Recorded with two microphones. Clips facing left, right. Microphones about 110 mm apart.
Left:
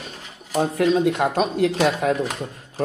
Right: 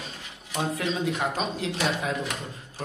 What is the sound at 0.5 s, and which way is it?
Speech, 40° left (ahead or behind).